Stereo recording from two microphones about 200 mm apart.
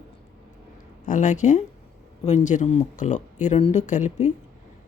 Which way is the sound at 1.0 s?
40° left (ahead or behind).